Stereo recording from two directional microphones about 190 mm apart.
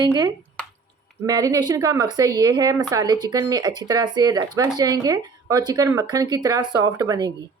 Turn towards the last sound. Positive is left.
turn(degrees=-20)  # may be behind; listen again after turning